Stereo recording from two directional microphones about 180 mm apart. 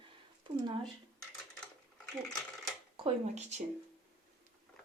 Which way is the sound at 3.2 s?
40° right (ahead or behind).